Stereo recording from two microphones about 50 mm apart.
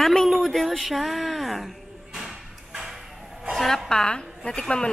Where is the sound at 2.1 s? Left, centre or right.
Centre.